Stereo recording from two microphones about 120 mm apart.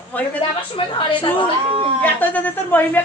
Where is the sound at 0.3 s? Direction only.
45° left (ahead or behind).